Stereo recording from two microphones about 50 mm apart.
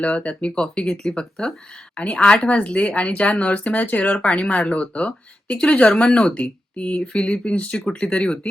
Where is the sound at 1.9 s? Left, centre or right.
Left.